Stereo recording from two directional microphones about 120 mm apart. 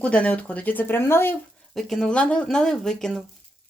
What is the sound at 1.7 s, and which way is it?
Speech, 5° left (ahead or behind).